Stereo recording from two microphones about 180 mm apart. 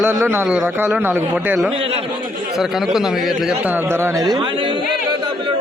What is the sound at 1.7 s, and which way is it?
Music, 35° right (ahead or behind).